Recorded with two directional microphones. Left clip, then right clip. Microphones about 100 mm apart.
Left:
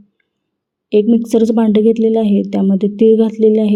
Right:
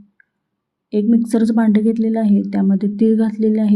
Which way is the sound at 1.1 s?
30° left (ahead or behind).